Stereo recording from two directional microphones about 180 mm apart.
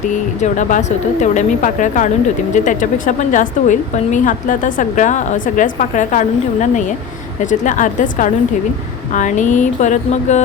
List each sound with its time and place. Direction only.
0.4 s speech: 45° left (ahead or behind)